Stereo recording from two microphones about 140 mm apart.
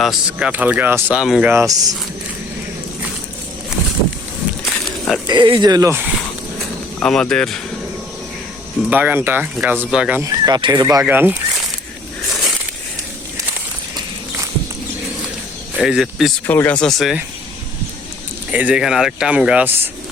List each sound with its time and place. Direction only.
0.0 s speech: 5° right (ahead or behind)
1.5 s speech: 20° right (ahead or behind)
4.6 s a sound: centre (ahead or behind)
5.2 s speech: 30° right (ahead or behind)
6.6 s a sound: 5° left (ahead or behind)
8.9 s speech: 10° right (ahead or behind)
10.2 s speech: 30° right (ahead or behind)
11.0 s speech: 15° right (ahead or behind)
12.3 s a sound: centre (ahead or behind)
15.7 s speech: 5° right (ahead or behind)
16.5 s speech: 15° left (ahead or behind)
16.8 s speech: centre (ahead or behind)
18.5 s speech: 10° right (ahead or behind)